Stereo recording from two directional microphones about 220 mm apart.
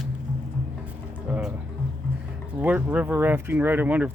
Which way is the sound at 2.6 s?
10° right (ahead or behind).